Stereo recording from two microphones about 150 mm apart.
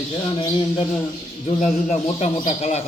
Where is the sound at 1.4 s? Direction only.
50° left (ahead or behind).